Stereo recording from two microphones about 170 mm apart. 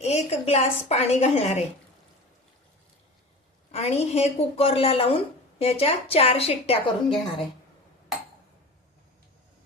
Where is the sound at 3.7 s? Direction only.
40° left (ahead or behind).